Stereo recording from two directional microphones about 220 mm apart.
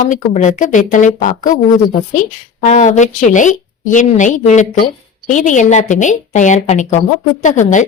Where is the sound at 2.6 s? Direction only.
35° left (ahead or behind).